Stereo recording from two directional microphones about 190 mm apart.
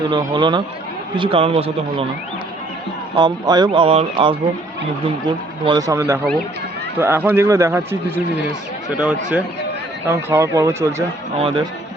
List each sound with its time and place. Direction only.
0.1 s speech: 25° right (ahead or behind)
3.2 s a man's voice: 20° right (ahead or behind)
11.3 s speech: 30° right (ahead or behind)